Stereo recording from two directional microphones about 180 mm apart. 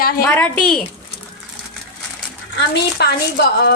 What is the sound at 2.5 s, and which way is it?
A woman's voice, 65° left (ahead or behind).